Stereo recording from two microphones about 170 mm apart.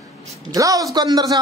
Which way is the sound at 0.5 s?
20° right (ahead or behind).